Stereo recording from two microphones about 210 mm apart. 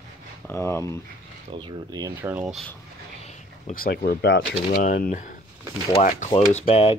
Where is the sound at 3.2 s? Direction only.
30° left (ahead or behind).